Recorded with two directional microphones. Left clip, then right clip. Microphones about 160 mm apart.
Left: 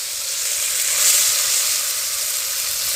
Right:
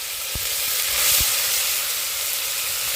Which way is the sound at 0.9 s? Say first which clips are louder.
Left 3 dB; 45° right (ahead or behind).